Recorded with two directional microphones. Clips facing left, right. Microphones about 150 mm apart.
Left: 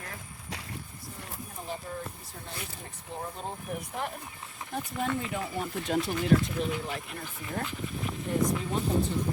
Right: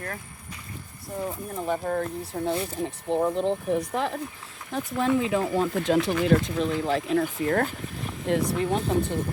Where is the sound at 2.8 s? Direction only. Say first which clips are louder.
Right 16 dB; 90° right; by 8.8 s 75° right (ahead or behind).